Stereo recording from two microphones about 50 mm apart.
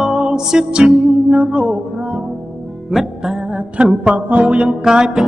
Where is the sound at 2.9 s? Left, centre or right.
Centre.